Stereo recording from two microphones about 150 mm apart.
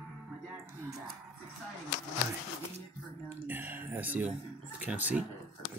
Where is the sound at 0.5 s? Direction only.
15° right (ahead or behind).